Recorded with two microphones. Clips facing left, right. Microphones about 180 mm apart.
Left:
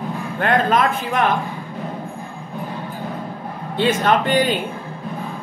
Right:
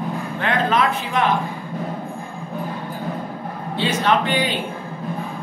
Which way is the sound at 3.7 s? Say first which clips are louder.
Left 2 dB; 50° left (ahead or behind).